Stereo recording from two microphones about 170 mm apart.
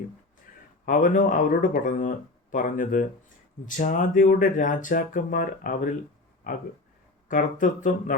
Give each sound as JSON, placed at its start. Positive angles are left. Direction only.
{"t": 0.9, "sound": "speech", "side_deg": 50}